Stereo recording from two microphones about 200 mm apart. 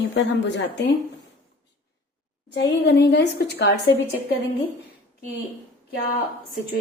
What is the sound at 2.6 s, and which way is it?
A woman's voice, 60° left (ahead or behind).